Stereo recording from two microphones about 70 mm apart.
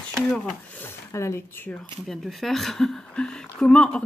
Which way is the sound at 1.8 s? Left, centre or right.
Centre.